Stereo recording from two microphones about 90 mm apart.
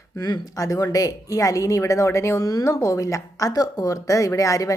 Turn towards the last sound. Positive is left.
turn(degrees=40)  # may be behind; listen again after turning